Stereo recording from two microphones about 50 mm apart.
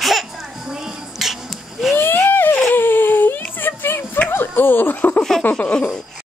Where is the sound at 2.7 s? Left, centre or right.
Left.